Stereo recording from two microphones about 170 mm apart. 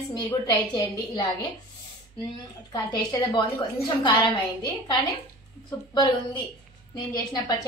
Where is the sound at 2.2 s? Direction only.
20° left (ahead or behind).